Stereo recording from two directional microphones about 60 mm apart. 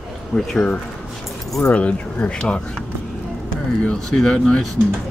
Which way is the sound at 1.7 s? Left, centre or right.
Left.